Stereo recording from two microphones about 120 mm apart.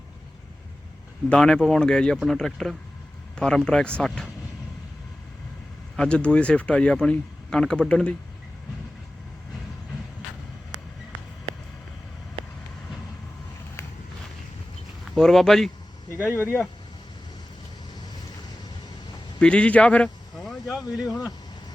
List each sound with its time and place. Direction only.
1.3 s speech: 5° left (ahead or behind)
6.0 s speech: 10° left (ahead or behind)
15.1 s speech: 5° left (ahead or behind)
16.3 s speech: 20° left (ahead or behind)
19.4 s speech: 10° left (ahead or behind)